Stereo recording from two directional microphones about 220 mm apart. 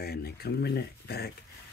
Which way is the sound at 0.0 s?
45° left (ahead or behind).